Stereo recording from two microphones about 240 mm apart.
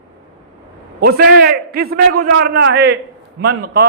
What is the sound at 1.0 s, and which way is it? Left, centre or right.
A man's voice, right.